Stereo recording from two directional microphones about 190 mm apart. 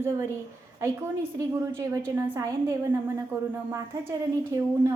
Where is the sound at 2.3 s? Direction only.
15° right (ahead or behind).